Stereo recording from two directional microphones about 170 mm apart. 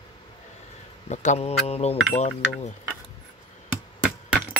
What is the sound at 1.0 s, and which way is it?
Mantra, 40° left (ahead or behind).